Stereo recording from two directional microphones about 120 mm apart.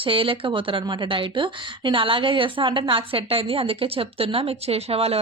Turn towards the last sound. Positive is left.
turn(degrees=-55)  # may be behind; listen again after turning